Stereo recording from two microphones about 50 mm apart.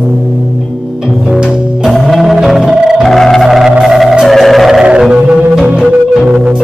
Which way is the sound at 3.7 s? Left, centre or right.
Centre.